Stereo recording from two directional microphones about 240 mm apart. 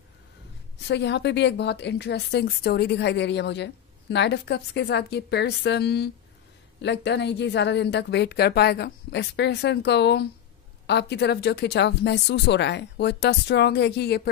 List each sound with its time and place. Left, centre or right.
0.8 s a woman's voice: left